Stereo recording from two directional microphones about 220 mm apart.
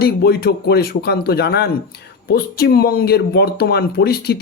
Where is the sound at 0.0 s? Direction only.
45° left (ahead or behind).